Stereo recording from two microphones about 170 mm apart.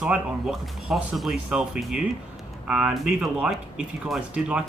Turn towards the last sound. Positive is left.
turn(degrees=-5)  # may be behind; listen again after turning